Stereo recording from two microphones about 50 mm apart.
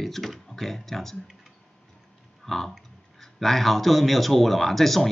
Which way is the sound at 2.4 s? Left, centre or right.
Centre.